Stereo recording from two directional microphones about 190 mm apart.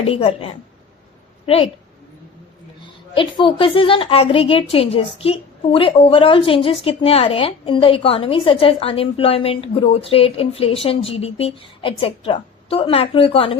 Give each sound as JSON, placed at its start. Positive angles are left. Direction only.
{"t": 0.1, "sound": "a woman's voice", "side_deg": 30}
{"t": 2.8, "sound": "a woman's voice", "side_deg": 25}